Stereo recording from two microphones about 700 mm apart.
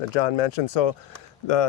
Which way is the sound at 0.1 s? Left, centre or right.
Left.